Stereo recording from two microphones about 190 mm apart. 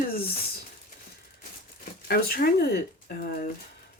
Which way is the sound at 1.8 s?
50° left (ahead or behind).